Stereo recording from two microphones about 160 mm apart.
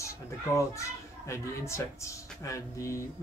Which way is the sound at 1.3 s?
15° left (ahead or behind).